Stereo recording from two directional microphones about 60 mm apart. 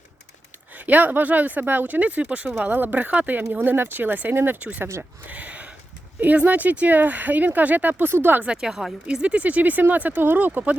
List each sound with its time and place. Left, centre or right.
0.8 s speech: right
5.3 s a sound: right
6.1 s speech: right
8.4 s speech: centre
9.0 s speech: centre